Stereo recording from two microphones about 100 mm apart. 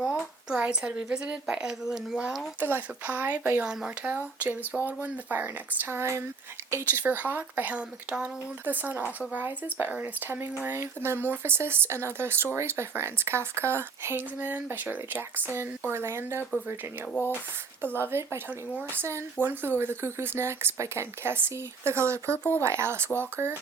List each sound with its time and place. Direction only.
0.0 s speech: 5° right (ahead or behind)
2.6 s speech: 20° right (ahead or behind)
7.0 s speech: 15° right (ahead or behind)
17.1 s speech: 20° left (ahead or behind)
18.1 s speech: 25° right (ahead or behind)